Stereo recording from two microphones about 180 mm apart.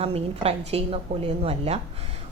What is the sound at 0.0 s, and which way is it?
A woman's voice, 35° right (ahead or behind).